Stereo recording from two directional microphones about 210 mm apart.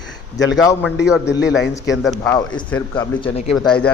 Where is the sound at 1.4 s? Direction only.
55° left (ahead or behind).